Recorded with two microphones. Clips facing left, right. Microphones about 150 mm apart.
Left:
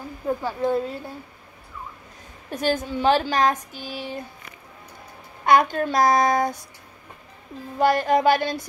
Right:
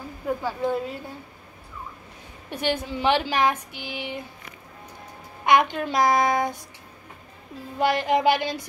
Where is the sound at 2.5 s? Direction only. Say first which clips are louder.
Left 3 dB; 45° left (ahead or behind).